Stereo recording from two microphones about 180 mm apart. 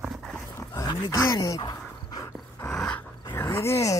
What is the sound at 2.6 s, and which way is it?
Dog, 5° left (ahead or behind).